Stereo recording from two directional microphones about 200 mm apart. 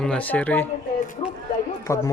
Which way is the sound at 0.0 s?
5° left (ahead or behind).